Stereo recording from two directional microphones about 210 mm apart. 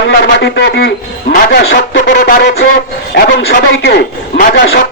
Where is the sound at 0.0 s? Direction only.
55° left (ahead or behind).